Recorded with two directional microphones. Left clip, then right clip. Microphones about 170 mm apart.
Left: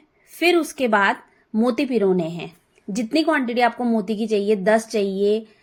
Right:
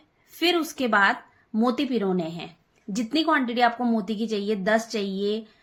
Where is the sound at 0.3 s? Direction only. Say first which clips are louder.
Left 5 dB; 25° left (ahead or behind).